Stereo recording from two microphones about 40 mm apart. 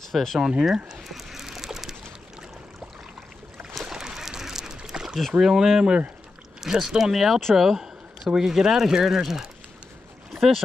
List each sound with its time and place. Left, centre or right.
0.1 s speech: centre
0.4 s speech: right
1.0 s boat: centre
3.8 s a sound: centre
5.4 s speech: centre
8.2 s speech: right
10.3 s boat: centre